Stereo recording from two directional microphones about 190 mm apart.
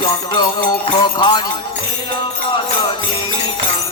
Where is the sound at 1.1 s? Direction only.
25° left (ahead or behind).